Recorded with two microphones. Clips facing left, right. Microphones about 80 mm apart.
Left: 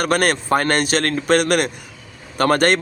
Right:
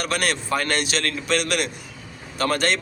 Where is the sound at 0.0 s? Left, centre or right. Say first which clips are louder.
Left 6 dB; left.